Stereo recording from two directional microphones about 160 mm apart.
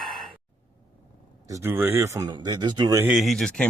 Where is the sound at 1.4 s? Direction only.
15° right (ahead or behind).